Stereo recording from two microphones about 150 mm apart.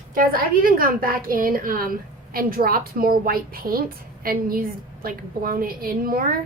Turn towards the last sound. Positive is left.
turn(degrees=-75)  # may be behind; listen again after turning